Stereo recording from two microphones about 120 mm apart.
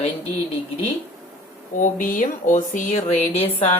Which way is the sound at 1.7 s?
90° left.